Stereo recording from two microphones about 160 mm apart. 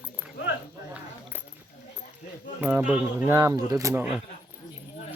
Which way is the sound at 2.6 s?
10° right (ahead or behind).